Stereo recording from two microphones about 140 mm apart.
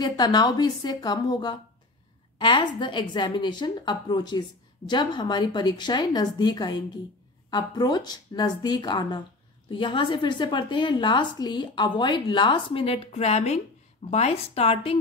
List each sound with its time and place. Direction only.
0.0 s a woman's voice: 30° left (ahead or behind); by 15.0 s 45° left (ahead or behind)